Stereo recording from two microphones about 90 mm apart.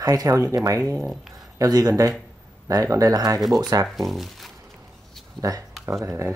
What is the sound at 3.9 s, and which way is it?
Speech, centre (ahead or behind).